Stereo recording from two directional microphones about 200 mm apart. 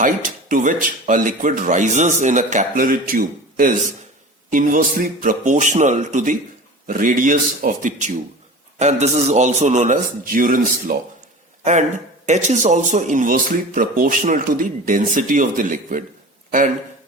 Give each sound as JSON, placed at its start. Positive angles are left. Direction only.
{"t": 0.0, "sound": "a man's voice", "side_deg": -40}